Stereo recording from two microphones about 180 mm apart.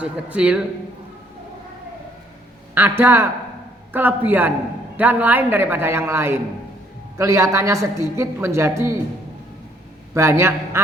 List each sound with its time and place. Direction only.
0.0 s speech: 5° right (ahead or behind)
2.7 s a woman's voice: 10° right (ahead or behind)
10.2 s a woman's voice: 15° right (ahead or behind)